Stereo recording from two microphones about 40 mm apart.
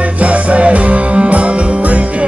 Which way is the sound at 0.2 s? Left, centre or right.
Right.